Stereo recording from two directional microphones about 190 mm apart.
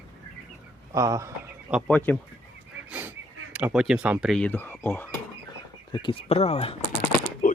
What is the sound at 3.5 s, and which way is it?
Speech, 5° right (ahead or behind).